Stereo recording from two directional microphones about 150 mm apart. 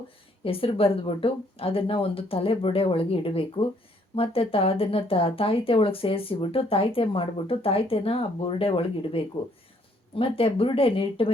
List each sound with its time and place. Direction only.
0.4 s speech: 40° left (ahead or behind)